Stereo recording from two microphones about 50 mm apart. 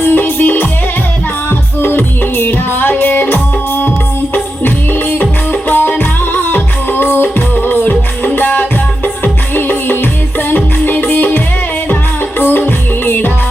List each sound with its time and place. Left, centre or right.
0.0 s music: left
5.2 s music: left